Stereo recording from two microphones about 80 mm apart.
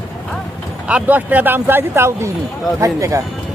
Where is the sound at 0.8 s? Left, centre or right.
Centre; by 3.2 s right.